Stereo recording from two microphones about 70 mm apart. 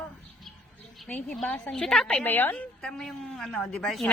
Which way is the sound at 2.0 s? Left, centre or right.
Left.